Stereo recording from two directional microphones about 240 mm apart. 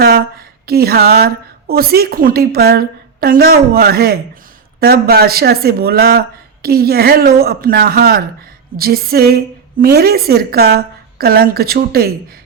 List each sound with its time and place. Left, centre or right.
0.0 s a woman's voice: right